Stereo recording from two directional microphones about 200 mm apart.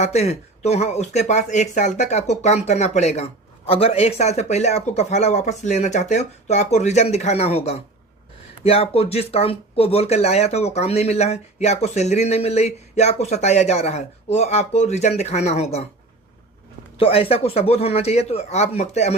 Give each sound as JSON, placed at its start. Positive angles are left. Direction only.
{"t": 0.0, "sound": "speech", "side_deg": 30}
{"t": 17.0, "sound": "speech", "side_deg": 30}